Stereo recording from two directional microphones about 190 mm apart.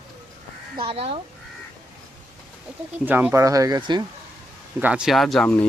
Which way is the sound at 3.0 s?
10° right (ahead or behind).